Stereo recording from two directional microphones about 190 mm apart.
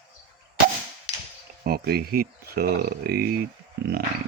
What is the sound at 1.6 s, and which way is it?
Speech, 55° right (ahead or behind).